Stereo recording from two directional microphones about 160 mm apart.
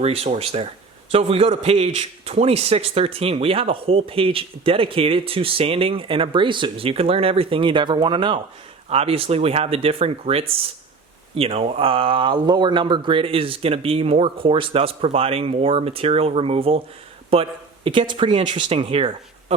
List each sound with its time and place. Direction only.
0.0 s a man's voice: 40° right (ahead or behind)